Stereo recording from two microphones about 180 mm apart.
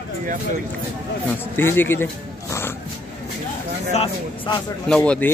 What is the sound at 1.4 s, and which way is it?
Speech, 10° left (ahead or behind).